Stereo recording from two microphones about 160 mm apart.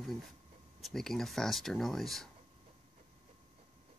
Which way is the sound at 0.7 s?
Centre (ahead or behind).